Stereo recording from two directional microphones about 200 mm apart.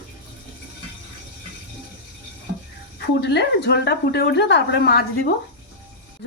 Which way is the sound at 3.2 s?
55° left (ahead or behind).